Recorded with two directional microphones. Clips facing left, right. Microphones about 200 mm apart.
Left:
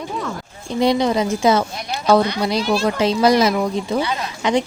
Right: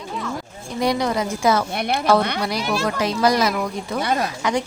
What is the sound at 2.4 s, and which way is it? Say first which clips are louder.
Speech: left 4 dB; 25° left (ahead or behind).